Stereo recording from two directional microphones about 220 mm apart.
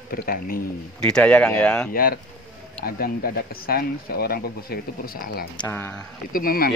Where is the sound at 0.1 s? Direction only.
40° left (ahead or behind).